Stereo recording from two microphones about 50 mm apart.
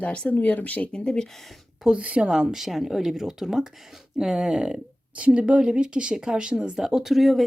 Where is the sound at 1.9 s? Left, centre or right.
Right.